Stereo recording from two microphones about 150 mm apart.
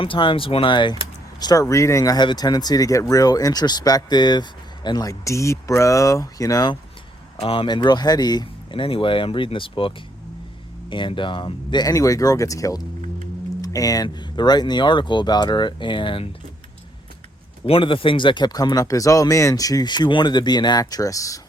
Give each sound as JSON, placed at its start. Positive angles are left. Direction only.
{"t": 0.0, "sound": "speech", "side_deg": 35}
{"t": 7.3, "sound": "speech", "side_deg": 40}
{"t": 17.7, "sound": "speech", "side_deg": 35}